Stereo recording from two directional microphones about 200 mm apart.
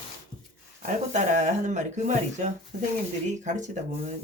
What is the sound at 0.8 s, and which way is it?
Speech, 35° right (ahead or behind).